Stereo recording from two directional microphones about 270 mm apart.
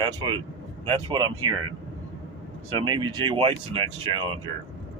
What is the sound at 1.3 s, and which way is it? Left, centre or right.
Speech, right.